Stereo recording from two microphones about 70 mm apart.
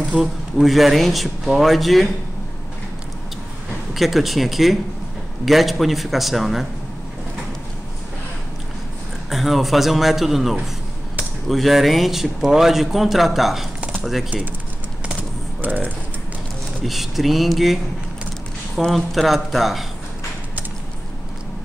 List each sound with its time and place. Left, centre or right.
0.2 s speech: centre
3.9 s speech: centre
9.3 s speech: centre
15.6 s speech: right
16.8 s speech: centre
18.9 s speech: centre